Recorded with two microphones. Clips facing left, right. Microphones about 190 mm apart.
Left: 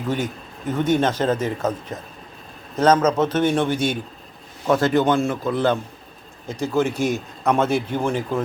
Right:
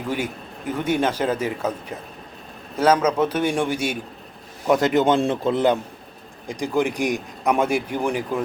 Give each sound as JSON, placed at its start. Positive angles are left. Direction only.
{"t": 0.7, "sound": "a man's voice", "side_deg": -10}